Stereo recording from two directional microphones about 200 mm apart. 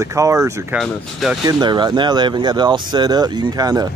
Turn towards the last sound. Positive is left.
turn(degrees=-20)  # may be behind; listen again after turning